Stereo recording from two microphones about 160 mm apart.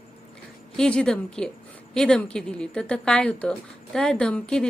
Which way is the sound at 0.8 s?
5° left (ahead or behind).